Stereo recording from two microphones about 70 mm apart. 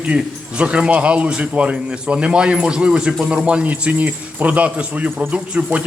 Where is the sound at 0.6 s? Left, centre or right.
Centre.